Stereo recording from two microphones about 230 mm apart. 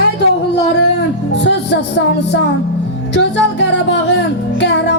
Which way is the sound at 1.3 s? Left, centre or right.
Left.